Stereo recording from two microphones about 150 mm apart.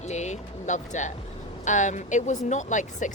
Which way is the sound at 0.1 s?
50° left (ahead or behind).